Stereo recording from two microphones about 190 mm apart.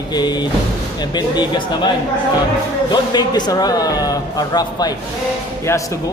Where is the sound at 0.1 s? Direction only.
20° left (ahead or behind).